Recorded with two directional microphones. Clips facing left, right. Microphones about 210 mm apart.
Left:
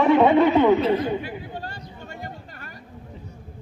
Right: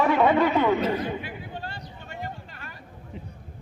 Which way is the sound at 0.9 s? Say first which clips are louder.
Left 5 dB; 40° left (ahead or behind).